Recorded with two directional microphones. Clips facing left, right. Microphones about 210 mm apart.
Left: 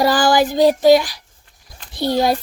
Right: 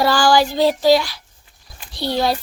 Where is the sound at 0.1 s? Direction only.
20° left (ahead or behind).